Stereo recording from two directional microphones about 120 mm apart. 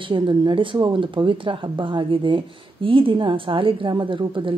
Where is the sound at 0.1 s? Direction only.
40° right (ahead or behind).